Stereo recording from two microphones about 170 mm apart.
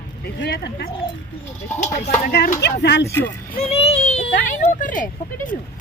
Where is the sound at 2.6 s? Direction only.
80° left.